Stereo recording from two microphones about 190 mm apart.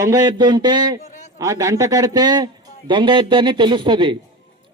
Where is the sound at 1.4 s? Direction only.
15° right (ahead or behind).